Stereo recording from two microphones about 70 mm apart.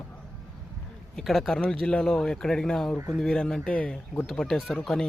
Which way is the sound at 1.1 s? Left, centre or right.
Centre.